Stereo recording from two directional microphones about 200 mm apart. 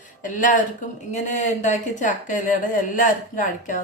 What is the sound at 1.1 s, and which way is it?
A woman's voice, 35° left (ahead or behind).